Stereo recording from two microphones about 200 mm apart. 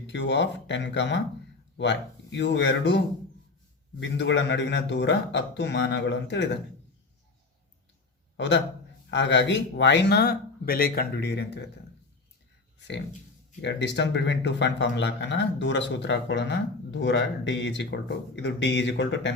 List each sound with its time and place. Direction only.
0.1 s speech: 60° left (ahead or behind)
4.2 s speech: 65° left (ahead or behind)
8.4 s speech: 60° left (ahead or behind)
13.6 s speech: 60° left (ahead or behind)